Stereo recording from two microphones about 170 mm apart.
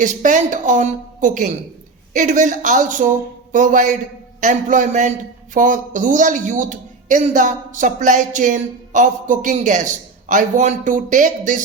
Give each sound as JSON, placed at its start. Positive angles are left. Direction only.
{"t": 0.0, "sound": "a man's voice", "side_deg": -45}